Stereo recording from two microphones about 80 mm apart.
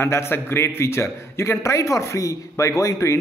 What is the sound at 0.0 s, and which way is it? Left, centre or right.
A man's voice, left.